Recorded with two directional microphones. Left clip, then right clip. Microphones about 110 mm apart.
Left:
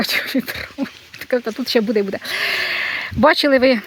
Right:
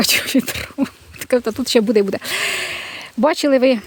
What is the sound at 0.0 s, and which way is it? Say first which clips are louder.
Speech: right 3 dB; 70° right (ahead or behind).